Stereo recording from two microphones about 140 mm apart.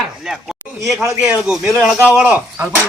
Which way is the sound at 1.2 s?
5° right (ahead or behind).